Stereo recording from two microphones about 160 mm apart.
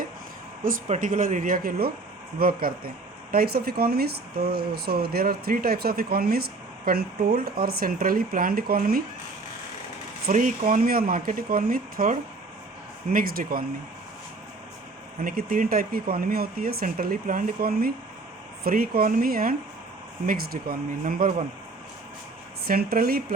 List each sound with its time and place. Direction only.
0.6 s speech: 55° right (ahead or behind)
10.2 s speech: 55° right (ahead or behind)
15.2 s speech: 65° right (ahead or behind)
22.6 s speech: 70° right (ahead or behind)